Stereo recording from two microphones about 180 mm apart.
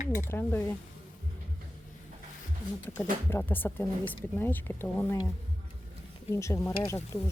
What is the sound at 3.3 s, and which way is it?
A woman's voice, 10° left (ahead or behind).